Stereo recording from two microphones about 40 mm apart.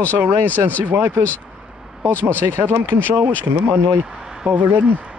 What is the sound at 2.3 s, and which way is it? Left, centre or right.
Speech, right.